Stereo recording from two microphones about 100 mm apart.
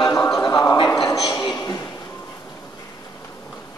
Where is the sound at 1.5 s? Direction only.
35° left (ahead or behind).